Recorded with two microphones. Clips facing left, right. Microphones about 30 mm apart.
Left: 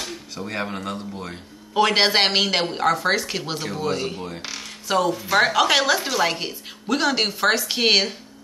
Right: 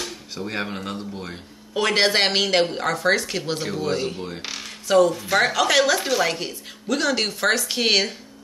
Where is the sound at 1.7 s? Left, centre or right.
Centre.